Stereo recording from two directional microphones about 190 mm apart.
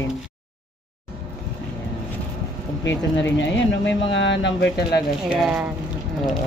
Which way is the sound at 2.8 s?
70° left (ahead or behind).